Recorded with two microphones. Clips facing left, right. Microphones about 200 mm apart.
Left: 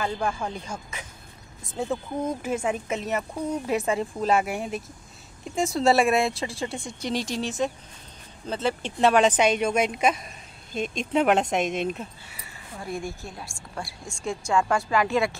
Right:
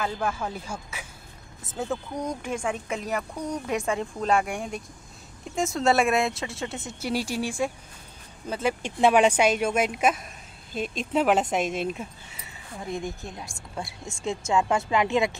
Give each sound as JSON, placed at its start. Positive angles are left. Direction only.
{"t": 0.0, "sound": "speech", "side_deg": -5}
{"t": 12.8, "sound": "a woman's voice", "side_deg": -20}